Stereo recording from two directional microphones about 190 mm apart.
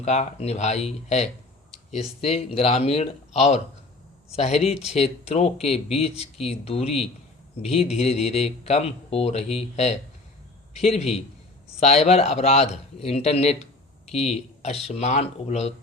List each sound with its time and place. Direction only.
0.0 s speech: 35° left (ahead or behind)